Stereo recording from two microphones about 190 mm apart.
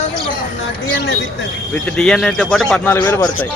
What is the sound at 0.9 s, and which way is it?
Speech, 70° left (ahead or behind).